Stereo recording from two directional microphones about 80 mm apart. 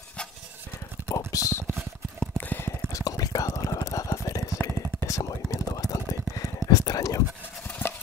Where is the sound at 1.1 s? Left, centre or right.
Left.